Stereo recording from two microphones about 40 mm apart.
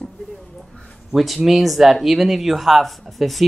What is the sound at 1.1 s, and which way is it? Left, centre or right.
Speech, centre.